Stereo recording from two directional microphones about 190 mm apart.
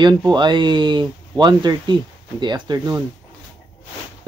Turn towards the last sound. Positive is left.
turn(degrees=-20)  # may be behind; listen again after turning